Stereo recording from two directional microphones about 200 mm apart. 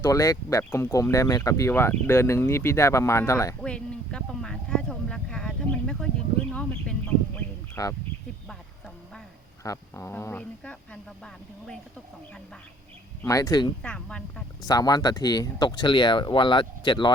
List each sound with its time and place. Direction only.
0.0 s speech: 15° left (ahead or behind)
9.6 s speech: 15° left (ahead or behind)
13.2 s speech: 15° left (ahead or behind)
13.8 s speech: 5° left (ahead or behind)
14.7 s speech: 20° left (ahead or behind)